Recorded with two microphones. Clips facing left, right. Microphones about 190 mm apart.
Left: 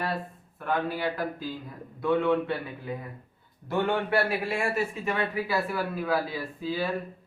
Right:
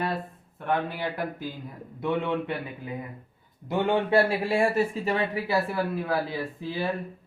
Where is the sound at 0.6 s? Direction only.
20° right (ahead or behind).